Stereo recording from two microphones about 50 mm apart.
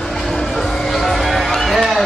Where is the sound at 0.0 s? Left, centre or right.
Centre.